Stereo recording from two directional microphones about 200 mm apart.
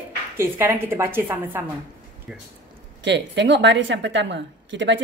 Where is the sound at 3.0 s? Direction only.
60° right (ahead or behind).